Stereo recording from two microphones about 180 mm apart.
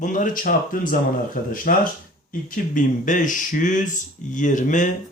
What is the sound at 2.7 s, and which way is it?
Speech, 45° left (ahead or behind).